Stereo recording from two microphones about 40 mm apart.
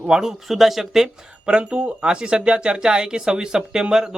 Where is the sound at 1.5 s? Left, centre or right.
Right.